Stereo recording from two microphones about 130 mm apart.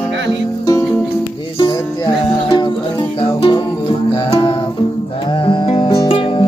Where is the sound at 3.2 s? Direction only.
40° left (ahead or behind).